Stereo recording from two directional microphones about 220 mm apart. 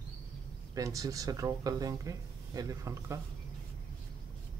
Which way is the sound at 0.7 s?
15° right (ahead or behind).